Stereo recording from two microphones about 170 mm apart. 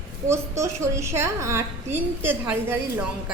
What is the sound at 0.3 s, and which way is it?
A woman's voice, 15° right (ahead or behind).